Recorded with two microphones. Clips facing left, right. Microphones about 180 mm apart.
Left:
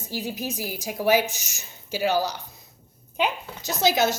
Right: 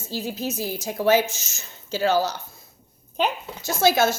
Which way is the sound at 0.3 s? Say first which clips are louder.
Right 3 dB; 15° left (ahead or behind).